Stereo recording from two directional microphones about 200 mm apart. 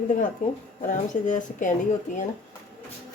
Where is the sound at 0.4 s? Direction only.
40° left (ahead or behind).